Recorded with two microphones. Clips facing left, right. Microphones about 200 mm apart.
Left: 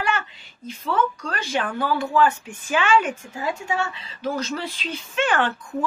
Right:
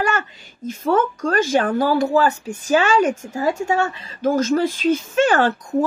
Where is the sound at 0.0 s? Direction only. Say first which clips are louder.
Right 4 dB; 45° right (ahead or behind).